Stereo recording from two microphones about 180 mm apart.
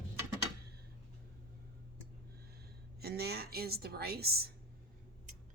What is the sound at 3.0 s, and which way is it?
A woman's voice, 60° right (ahead or behind).